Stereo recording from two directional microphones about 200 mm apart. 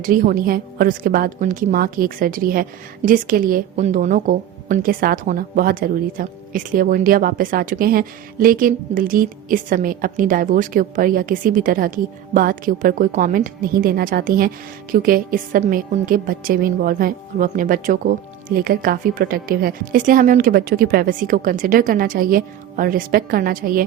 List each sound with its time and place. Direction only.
0.0 s a woman's voice: 45° right (ahead or behind)